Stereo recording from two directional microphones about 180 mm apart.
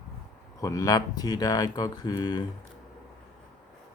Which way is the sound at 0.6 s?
20° left (ahead or behind).